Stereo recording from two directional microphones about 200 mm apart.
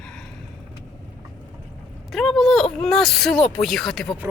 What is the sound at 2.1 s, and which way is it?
Speech, centre (ahead or behind).